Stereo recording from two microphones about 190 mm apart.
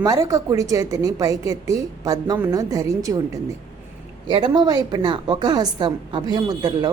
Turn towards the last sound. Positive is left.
turn(degrees=-20)  # may be behind; listen again after turning